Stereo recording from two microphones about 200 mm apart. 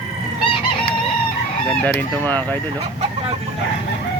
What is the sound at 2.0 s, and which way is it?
Speech, 10° left (ahead or behind).